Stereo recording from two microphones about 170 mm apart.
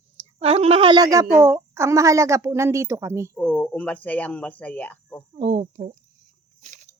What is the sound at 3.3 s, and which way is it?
Speech, 10° left (ahead or behind).